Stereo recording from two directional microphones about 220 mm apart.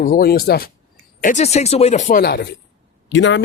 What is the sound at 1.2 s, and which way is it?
Speech, 30° left (ahead or behind).